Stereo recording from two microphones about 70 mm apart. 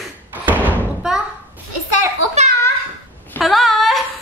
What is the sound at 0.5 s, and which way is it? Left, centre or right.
Slam, right.